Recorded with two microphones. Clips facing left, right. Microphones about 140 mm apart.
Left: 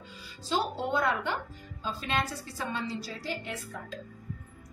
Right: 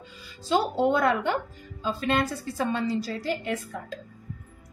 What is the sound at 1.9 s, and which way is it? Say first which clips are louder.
A woman's voice: right 6 dB; 55° right (ahead or behind).